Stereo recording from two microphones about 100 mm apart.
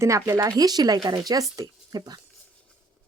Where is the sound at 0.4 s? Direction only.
40° right (ahead or behind).